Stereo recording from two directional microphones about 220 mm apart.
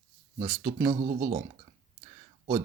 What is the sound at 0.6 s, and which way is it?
Speech, 20° right (ahead or behind).